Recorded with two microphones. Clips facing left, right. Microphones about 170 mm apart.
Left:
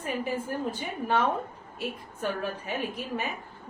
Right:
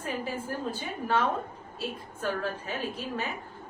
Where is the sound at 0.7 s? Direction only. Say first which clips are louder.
Right 1 dB; 20° left (ahead or behind).